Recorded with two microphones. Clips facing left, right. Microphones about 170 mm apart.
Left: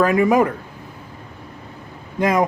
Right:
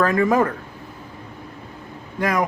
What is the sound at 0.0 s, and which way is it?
Speech, 15° left (ahead or behind).